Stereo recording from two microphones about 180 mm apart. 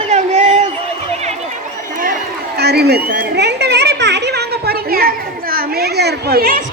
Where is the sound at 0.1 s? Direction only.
40° right (ahead or behind).